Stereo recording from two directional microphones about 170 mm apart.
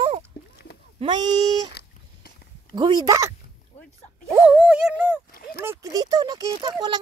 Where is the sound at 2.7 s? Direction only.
25° right (ahead or behind).